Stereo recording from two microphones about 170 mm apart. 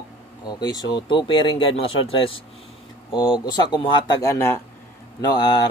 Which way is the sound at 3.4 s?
25° left (ahead or behind).